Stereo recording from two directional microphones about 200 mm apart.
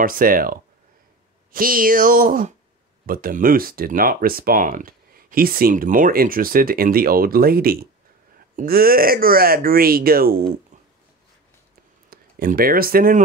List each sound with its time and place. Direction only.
0.0 s speech: 45° right (ahead or behind)
12.1 s speech: 45° right (ahead or behind)